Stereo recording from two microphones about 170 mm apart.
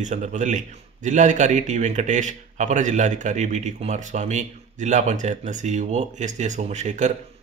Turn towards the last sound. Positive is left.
turn(degrees=-45)  # may be behind; listen again after turning